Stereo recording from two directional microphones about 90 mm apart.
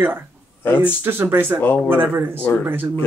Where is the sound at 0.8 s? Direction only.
25° right (ahead or behind).